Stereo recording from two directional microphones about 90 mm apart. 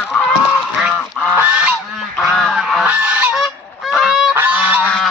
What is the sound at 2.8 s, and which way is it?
Goose, 20° right (ahead or behind).